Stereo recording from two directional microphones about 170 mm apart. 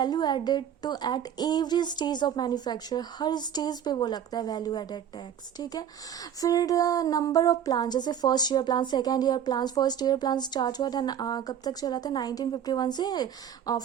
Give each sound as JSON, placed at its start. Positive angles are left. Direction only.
{"t": 0.0, "sound": "speech", "side_deg": 25}